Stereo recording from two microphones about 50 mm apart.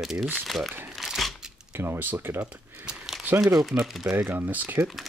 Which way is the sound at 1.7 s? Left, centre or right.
Right.